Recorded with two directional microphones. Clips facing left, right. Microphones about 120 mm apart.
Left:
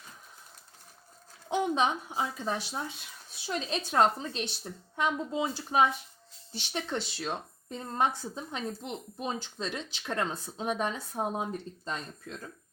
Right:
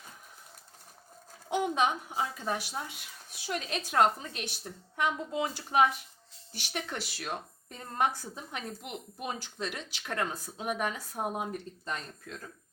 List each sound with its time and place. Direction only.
1.5 s speech: 20° left (ahead or behind)